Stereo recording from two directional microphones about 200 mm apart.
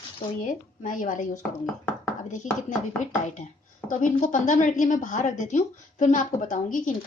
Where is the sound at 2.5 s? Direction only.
35° left (ahead or behind).